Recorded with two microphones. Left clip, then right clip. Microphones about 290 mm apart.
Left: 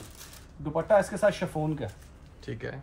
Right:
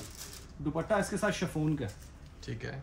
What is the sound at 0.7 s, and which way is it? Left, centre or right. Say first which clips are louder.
Speech: left 8 dB; centre.